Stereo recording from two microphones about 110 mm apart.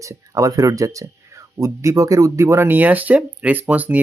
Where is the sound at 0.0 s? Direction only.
30° right (ahead or behind).